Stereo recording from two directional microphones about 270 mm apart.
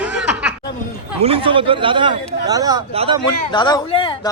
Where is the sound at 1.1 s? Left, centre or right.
Right.